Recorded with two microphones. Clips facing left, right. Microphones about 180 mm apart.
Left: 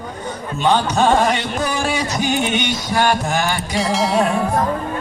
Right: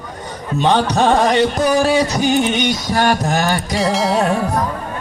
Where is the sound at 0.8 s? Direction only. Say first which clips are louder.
Right 1 dB; 35° right (ahead or behind).